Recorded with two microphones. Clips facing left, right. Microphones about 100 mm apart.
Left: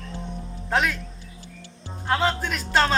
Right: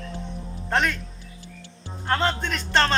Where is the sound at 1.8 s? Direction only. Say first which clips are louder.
Left 1 dB; 15° left (ahead or behind).